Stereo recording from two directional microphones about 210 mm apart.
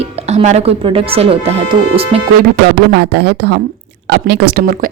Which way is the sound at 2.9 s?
50° right (ahead or behind).